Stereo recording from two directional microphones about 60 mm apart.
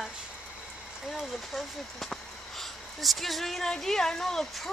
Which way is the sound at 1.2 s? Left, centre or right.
Centre.